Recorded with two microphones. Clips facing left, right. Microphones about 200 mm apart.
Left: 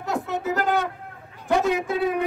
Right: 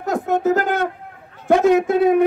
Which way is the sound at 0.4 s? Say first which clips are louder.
Right 5 dB; 40° right (ahead or behind).